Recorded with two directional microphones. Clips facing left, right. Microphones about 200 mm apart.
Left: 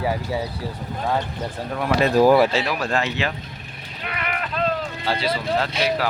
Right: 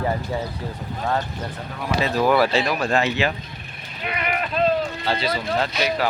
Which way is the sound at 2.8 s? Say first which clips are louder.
Right 3 dB; 5° right (ahead or behind).